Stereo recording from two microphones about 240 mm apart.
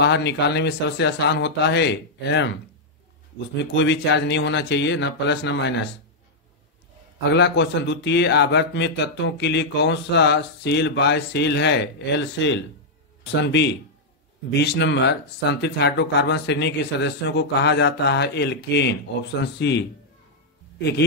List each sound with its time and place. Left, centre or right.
0.0 s speech: left
3.7 s speech: left
7.3 s speech: left